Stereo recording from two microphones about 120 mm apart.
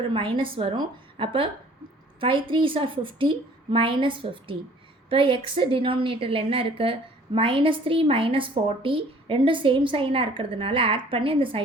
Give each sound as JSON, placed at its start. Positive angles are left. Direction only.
{"t": 0.0, "sound": "a woman's voice", "side_deg": -45}